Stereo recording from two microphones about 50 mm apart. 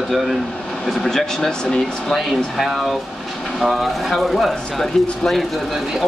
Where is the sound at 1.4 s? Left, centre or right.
Centre.